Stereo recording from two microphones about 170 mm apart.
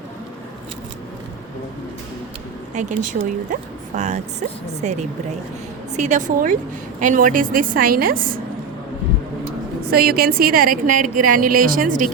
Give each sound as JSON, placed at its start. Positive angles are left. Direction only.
{"t": 2.7, "sound": "a woman's voice", "side_deg": -50}
{"t": 9.9, "sound": "a woman's voice", "side_deg": -65}